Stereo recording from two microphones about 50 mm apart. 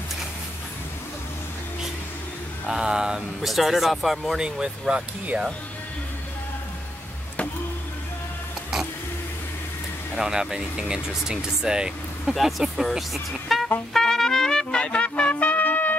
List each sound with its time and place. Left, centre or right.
2.6 s speech: centre
3.4 s speech: centre
4.4 s speech: centre
10.1 s speech: centre
12.4 s speech: centre
13.9 s trumpet: centre; by 16.0 s left